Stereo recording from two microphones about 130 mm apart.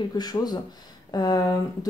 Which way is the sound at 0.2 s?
30° left (ahead or behind).